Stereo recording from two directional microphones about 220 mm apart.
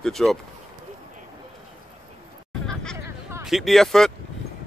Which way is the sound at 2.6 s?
5° left (ahead or behind).